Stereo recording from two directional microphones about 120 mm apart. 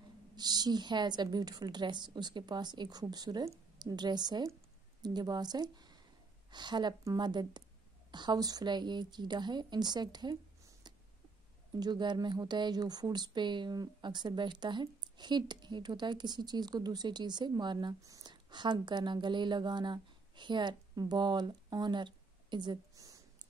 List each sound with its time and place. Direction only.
0.4 s a woman's voice: 35° right (ahead or behind)
11.7 s speech: 35° right (ahead or behind)